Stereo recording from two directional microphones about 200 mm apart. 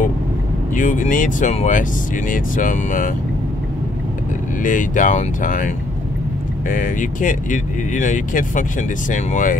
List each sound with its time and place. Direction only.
0.7 s speech: 40° left (ahead or behind)
4.6 s speech: 40° left (ahead or behind)
6.7 s speech: 40° left (ahead or behind)